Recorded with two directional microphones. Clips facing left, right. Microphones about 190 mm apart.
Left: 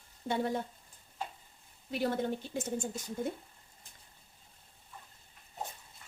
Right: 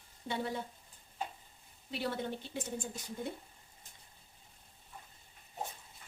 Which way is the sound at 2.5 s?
45° left (ahead or behind).